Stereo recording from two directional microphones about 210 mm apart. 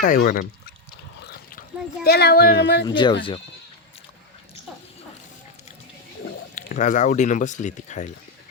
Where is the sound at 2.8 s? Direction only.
20° left (ahead or behind).